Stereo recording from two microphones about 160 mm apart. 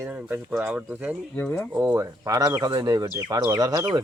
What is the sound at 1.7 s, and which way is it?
Speech, 15° right (ahead or behind).